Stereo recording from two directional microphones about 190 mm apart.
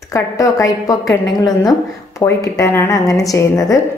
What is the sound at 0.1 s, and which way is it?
A woman's voice, 15° left (ahead or behind).